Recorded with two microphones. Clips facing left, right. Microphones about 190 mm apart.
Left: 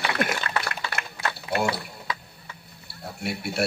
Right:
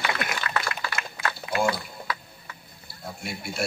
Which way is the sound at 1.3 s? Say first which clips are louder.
Right 1 dB; 65° left (ahead or behind).